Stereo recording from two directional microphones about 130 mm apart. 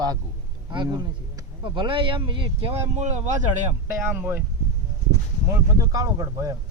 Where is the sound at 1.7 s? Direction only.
40° right (ahead or behind).